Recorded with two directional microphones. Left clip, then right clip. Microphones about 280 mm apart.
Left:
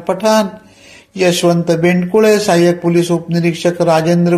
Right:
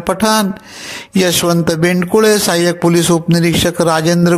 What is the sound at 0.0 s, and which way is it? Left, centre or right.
A man's voice, right.